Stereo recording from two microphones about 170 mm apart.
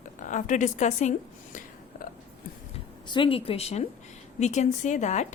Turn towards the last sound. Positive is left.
turn(degrees=45)  # may be behind; listen again after turning